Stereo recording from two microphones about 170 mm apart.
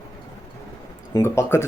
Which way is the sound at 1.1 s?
15° left (ahead or behind).